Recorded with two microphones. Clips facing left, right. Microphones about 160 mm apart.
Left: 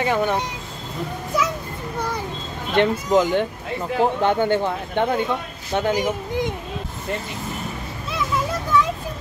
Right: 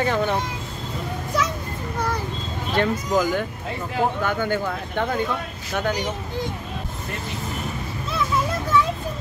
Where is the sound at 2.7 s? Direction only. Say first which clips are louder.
Left 4 dB; 25° left (ahead or behind).